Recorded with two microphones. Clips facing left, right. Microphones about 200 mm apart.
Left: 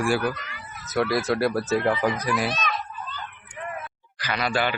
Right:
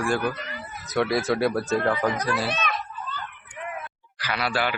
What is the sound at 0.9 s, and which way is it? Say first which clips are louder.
Speech: even; centre (ahead or behind).